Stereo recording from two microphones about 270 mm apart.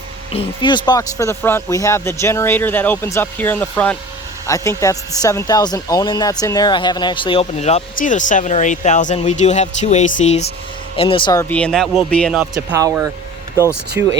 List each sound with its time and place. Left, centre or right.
0.3 s speech: centre
12.5 s speech: centre